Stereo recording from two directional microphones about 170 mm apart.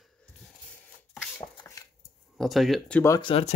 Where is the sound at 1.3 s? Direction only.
20° left (ahead or behind).